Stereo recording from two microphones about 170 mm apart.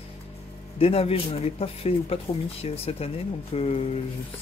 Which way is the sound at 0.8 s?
35° left (ahead or behind).